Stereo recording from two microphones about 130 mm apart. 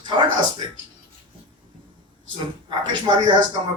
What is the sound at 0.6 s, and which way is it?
Speech, 35° right (ahead or behind).